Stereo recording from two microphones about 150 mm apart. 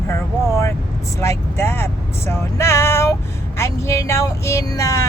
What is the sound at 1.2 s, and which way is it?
Speech, 15° left (ahead or behind).